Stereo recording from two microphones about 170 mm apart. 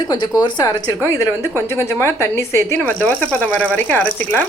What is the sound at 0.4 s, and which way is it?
A woman's voice, 25° left (ahead or behind).